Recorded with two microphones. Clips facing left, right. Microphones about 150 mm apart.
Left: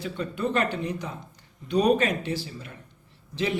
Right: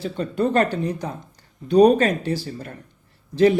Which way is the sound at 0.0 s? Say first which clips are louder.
Right 6 dB; 35° right (ahead or behind).